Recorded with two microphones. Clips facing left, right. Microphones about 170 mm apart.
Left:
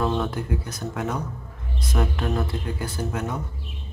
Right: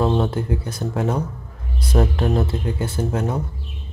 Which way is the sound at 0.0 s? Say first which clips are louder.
Right 5 dB; 30° right (ahead or behind).